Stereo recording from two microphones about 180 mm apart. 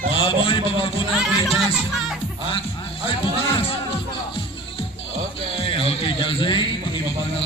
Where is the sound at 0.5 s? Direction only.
30° left (ahead or behind).